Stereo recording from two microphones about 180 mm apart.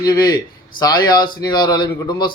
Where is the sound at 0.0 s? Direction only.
20° left (ahead or behind).